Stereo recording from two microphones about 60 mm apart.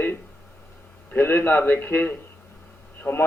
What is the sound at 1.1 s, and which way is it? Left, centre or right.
Speech, left.